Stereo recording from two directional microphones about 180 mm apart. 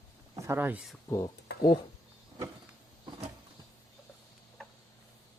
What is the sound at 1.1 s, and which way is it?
Speech, 15° left (ahead or behind).